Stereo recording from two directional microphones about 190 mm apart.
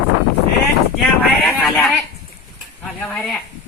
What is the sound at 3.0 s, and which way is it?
Speech, 5° left (ahead or behind).